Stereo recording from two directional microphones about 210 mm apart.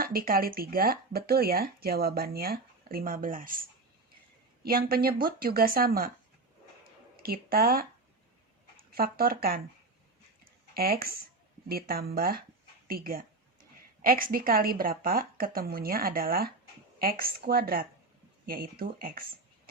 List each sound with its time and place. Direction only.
0.0 s speech: 45° right (ahead or behind)
4.6 s speech: 45° right (ahead or behind)
7.2 s speech: 45° right (ahead or behind)
8.9 s speech: 45° right (ahead or behind)
10.4 s a sound: 45° right (ahead or behind)
11.7 s speech: 45° right (ahead or behind)